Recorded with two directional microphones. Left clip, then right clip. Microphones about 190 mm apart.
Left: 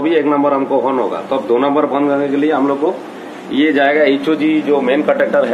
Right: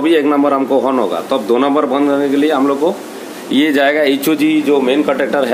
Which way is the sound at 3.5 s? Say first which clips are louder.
Even; 75° right (ahead or behind).